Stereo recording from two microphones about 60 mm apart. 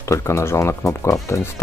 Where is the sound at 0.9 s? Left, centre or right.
Left.